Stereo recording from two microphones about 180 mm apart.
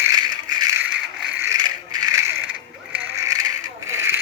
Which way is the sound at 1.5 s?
20° right (ahead or behind).